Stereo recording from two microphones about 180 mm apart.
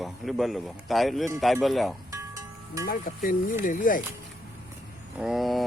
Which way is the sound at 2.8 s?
50° left (ahead or behind).